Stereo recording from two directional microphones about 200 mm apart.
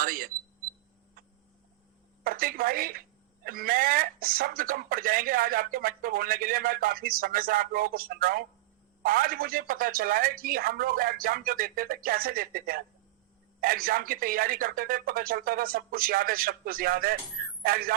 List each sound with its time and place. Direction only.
0.0 s speech: 45° right (ahead or behind)
2.2 s speech: 45° right (ahead or behind)